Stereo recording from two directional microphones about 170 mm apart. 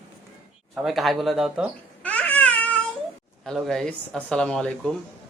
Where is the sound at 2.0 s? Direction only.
5° left (ahead or behind).